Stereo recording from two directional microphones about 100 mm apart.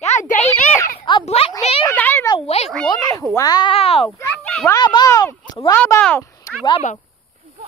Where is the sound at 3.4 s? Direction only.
40° left (ahead or behind).